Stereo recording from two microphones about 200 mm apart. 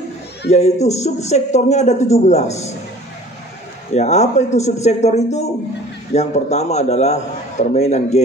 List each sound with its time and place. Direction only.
0.5 s a man's voice: 35° left (ahead or behind)
3.9 s a man's voice: 35° left (ahead or behind)